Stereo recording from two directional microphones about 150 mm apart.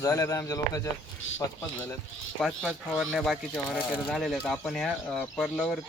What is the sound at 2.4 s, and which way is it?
Speech, centre (ahead or behind).